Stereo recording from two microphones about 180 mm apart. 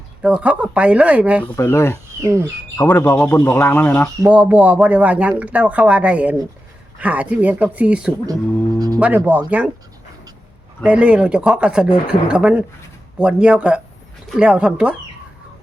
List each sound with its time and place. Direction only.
0.2 s speech: 5° right (ahead or behind)
1.5 s speech: 15° left (ahead or behind)
2.2 s speech: 15° right (ahead or behind)
2.7 s speech: 10° left (ahead or behind)
4.2 s speech: 10° right (ahead or behind)
10.8 s speech: 5° right (ahead or behind)